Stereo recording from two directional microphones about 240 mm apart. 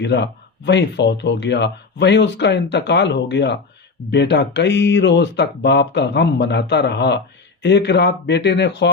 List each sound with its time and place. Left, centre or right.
0.0 s speech: left